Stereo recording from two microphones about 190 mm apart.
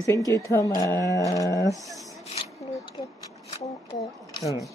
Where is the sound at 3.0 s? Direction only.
25° left (ahead or behind).